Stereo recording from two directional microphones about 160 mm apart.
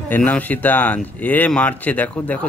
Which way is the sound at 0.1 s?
10° left (ahead or behind).